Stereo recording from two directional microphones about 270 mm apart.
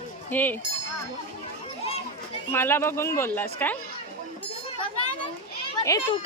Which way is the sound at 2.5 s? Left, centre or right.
Centre.